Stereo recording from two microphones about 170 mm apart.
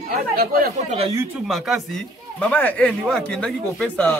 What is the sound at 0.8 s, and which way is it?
Speech, 35° right (ahead or behind).